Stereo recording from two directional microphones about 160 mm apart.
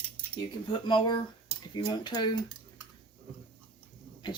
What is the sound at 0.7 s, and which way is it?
Speech, 30° left (ahead or behind).